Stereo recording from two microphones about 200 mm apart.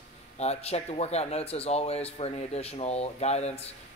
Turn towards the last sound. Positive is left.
turn(degrees=30)  # may be behind; listen again after turning